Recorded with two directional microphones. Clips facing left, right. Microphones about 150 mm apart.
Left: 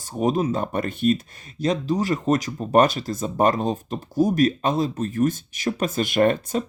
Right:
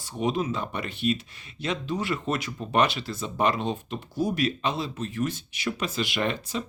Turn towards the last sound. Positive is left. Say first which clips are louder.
# left 9 dB
turn(degrees=50)  # may be behind; listen again after turning